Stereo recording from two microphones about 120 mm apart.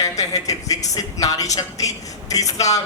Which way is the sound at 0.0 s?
30° left (ahead or behind).